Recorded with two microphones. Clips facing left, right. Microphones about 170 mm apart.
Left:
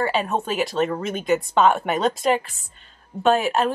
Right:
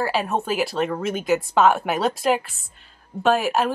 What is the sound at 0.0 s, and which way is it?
A woman's voice, 5° right (ahead or behind).